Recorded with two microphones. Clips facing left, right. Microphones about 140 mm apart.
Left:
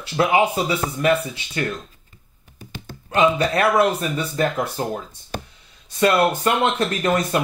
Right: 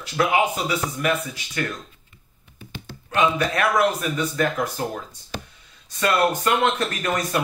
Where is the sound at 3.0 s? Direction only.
30° left (ahead or behind).